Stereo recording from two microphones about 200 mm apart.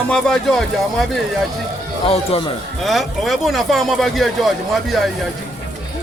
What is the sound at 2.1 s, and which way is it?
Speech, 30° left (ahead or behind).